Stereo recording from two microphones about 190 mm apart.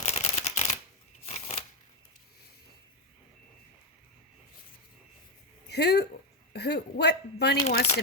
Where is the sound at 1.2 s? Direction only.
35° left (ahead or behind).